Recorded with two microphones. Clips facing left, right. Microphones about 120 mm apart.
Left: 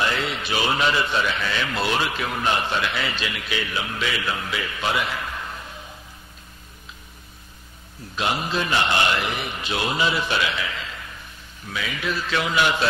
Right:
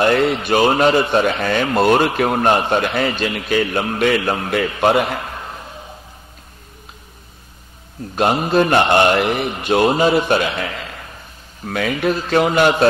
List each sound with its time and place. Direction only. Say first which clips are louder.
0.0 s speech: right 10 dB; 55° right (ahead or behind)
8.1 s speech: right 9 dB; 50° right (ahead or behind)